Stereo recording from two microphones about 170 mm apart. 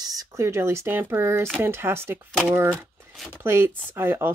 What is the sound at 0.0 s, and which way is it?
Speech, 20° right (ahead or behind).